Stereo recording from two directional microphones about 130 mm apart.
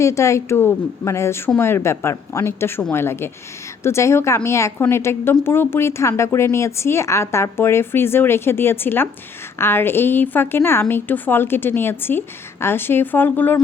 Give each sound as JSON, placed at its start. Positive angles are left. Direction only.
{"t": 0.0, "sound": "a woman's voice", "side_deg": 25}